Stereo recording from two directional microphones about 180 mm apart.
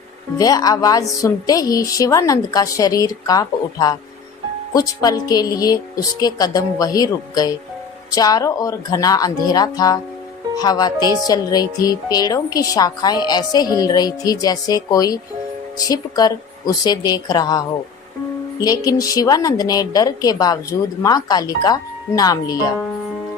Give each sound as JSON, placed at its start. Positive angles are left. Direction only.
{"t": 0.3, "sound": "a woman's voice", "side_deg": 20}